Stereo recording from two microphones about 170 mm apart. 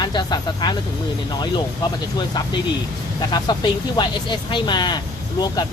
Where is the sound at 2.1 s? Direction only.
25° left (ahead or behind).